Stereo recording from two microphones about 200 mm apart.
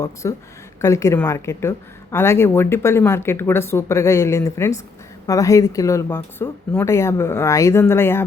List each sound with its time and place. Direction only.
0.0 s speech: 15° left (ahead or behind)